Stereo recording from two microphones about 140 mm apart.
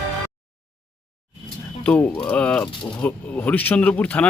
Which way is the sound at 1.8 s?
10° left (ahead or behind).